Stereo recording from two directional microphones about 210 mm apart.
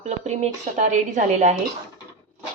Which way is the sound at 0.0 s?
30° right (ahead or behind).